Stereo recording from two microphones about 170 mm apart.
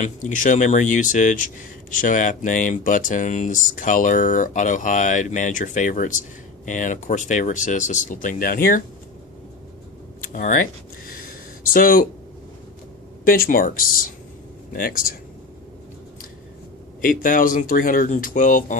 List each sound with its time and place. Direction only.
0.0 s speech: 50° left (ahead or behind)
10.3 s speech: 50° left (ahead or behind)
13.2 s speech: 60° left (ahead or behind)
17.0 s speech: 55° left (ahead or behind)